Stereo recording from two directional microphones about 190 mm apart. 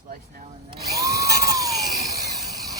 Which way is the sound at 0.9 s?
15° right (ahead or behind).